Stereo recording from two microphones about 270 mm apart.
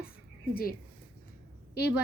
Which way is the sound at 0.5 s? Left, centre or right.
Left.